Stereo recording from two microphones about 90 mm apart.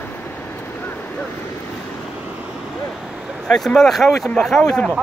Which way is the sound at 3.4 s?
10° left (ahead or behind).